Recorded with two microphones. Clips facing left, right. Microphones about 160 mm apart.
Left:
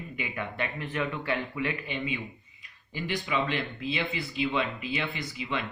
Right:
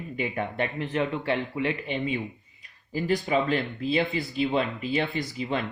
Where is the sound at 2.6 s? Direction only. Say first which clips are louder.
Right 6 dB; 40° right (ahead or behind).